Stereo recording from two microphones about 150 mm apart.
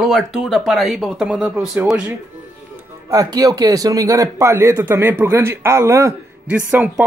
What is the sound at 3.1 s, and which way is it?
Speech, 25° right (ahead or behind).